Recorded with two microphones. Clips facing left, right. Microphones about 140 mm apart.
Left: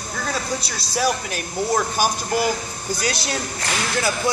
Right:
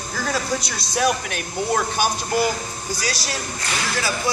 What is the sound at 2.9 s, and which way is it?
Speech, 50° left (ahead or behind).